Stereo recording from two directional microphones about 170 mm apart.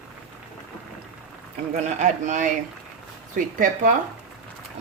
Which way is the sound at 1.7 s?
45° right (ahead or behind).